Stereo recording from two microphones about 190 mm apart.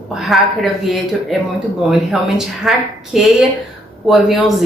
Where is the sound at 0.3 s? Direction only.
Centre (ahead or behind).